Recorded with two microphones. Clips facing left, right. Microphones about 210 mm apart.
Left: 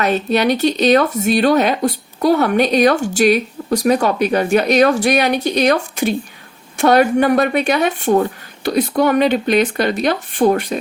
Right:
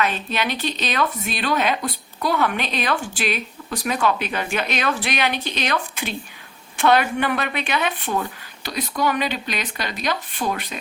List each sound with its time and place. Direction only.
0.0 s speech: 45° left (ahead or behind)